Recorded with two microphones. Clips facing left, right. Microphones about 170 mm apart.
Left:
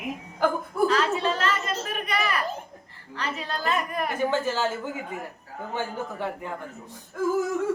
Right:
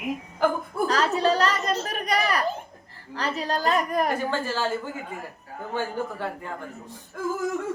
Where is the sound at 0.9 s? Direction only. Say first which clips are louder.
Right 5 dB; 40° right (ahead or behind).